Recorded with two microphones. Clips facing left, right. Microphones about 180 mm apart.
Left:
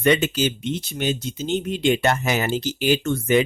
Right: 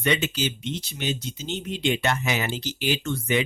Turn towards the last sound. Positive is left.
turn(degrees=50)  # may be behind; listen again after turning